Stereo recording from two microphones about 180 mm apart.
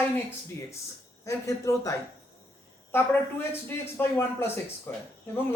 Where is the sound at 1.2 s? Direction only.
15° left (ahead or behind).